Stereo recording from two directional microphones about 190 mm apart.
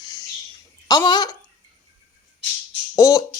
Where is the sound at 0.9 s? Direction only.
20° left (ahead or behind).